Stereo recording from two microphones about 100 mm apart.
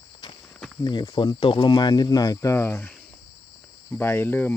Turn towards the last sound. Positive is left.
turn(degrees=20)  # may be behind; listen again after turning